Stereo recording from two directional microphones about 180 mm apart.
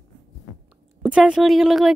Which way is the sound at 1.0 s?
5° right (ahead or behind).